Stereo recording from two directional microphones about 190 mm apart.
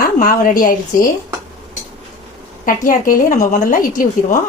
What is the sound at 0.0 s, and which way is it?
A woman's voice, 45° left (ahead or behind).